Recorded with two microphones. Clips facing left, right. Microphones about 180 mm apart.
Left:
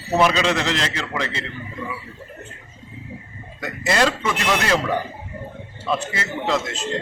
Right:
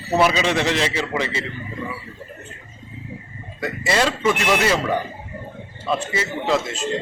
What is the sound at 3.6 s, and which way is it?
A man's voice, 5° right (ahead or behind).